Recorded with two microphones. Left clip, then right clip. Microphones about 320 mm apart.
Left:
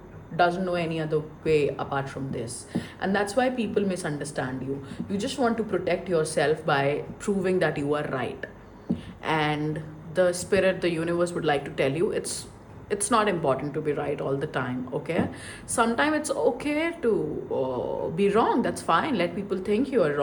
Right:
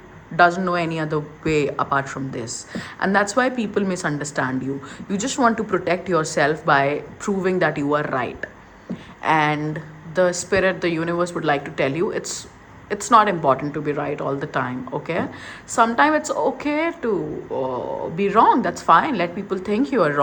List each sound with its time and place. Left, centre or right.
0.3 s a woman's voice: right